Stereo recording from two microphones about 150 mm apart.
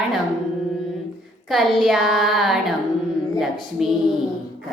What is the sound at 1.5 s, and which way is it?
Speech, centre (ahead or behind).